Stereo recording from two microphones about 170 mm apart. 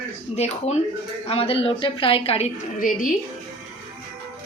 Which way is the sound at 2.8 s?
50° left (ahead or behind).